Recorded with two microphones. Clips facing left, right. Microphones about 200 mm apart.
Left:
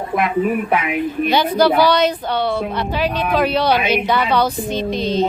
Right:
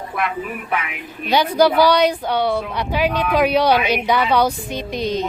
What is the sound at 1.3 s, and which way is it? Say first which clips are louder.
A woman's voice: right 1 dB; 15° right (ahead or behind).